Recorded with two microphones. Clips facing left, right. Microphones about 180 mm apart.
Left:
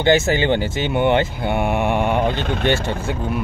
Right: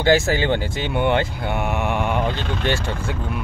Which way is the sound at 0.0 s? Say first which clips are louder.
Left 1 dB; 20° left (ahead or behind).